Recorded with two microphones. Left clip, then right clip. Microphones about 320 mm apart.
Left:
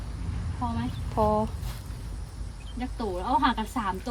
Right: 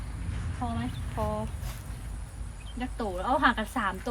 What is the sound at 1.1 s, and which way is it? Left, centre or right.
Speech, centre.